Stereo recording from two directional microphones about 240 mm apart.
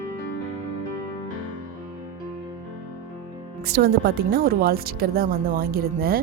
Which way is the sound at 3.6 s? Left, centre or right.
Right.